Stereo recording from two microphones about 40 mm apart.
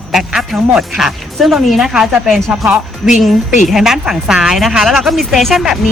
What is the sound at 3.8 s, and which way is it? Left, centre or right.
A woman's voice, centre.